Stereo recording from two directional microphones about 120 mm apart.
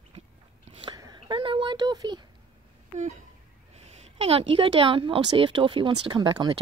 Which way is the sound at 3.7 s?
60° right (ahead or behind).